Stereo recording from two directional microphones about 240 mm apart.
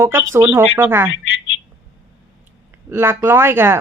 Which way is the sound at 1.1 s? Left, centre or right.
Left.